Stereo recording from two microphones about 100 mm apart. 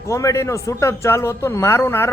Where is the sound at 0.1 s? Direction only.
30° left (ahead or behind).